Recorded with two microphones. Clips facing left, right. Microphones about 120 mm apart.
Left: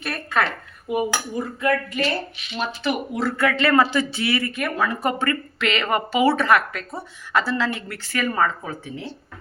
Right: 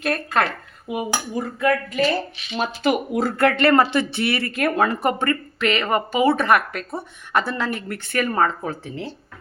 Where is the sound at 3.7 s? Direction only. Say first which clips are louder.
Right 1 dB; 30° right (ahead or behind).